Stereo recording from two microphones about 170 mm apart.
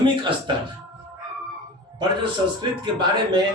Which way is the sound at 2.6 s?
25° right (ahead or behind).